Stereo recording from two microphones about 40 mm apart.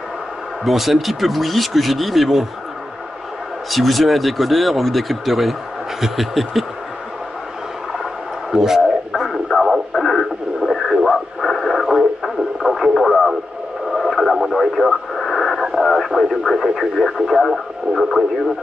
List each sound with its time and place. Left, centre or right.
0.7 s speech: centre
3.7 s speech: centre
8.0 s radio: centre
16.1 s speech: centre